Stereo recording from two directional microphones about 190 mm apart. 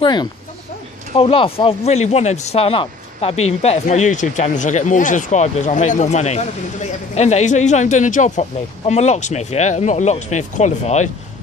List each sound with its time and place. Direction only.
0.0 s speech: 25° left (ahead or behind)